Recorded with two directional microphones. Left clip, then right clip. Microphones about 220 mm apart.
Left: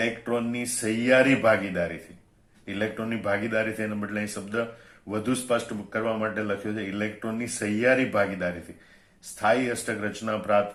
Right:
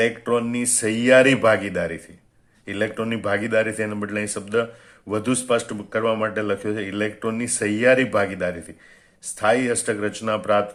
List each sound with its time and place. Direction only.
0.0 s speech: 40° right (ahead or behind)